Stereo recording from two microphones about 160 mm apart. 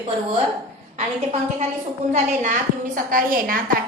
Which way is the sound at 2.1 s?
50° right (ahead or behind).